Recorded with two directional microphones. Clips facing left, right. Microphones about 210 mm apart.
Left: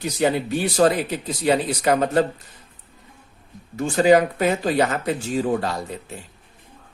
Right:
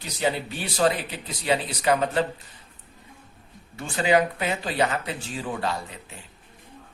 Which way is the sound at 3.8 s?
40° left (ahead or behind).